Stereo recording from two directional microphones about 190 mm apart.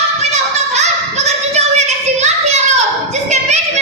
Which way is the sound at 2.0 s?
35° right (ahead or behind).